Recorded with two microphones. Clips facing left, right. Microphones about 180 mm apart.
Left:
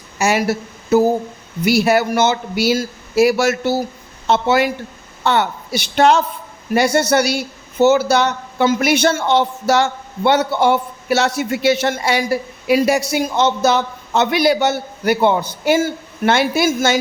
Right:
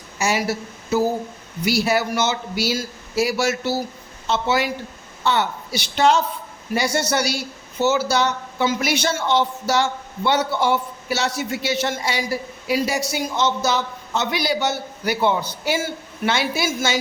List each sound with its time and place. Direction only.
0.2 s speech: 60° left (ahead or behind)